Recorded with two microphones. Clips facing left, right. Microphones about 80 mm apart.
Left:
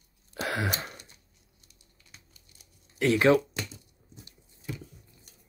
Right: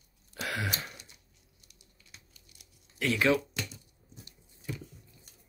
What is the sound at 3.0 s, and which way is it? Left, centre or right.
Speech, left.